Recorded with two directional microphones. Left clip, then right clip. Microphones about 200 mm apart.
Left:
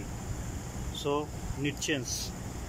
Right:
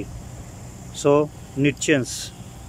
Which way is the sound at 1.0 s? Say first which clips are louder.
Right 14 dB; 60° right (ahead or behind).